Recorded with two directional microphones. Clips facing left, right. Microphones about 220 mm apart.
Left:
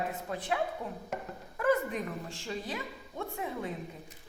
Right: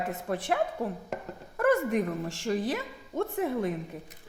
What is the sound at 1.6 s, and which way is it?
Speech, 75° right (ahead or behind).